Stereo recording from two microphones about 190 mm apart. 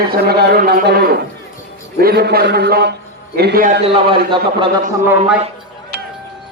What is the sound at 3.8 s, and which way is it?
Speech, 30° right (ahead or behind).